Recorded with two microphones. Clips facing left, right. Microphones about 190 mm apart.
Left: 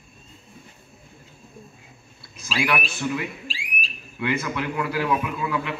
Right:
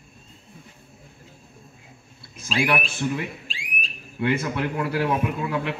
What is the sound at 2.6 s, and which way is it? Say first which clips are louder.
Speech: left 1 dB; 30° right (ahead or behind).